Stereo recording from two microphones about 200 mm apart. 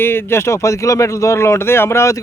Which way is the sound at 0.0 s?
10° left (ahead or behind).